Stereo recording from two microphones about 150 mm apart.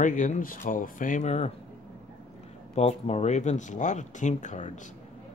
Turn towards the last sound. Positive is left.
turn(degrees=50)  # may be behind; listen again after turning